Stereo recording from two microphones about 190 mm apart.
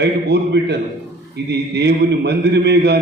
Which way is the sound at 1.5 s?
60° right (ahead or behind).